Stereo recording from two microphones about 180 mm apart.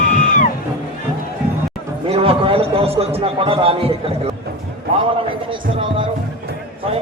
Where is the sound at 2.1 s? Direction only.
35° right (ahead or behind).